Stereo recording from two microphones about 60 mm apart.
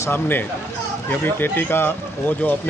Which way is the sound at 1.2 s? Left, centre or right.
Left.